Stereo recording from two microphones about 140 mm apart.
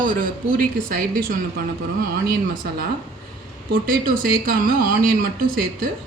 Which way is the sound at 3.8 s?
85° right.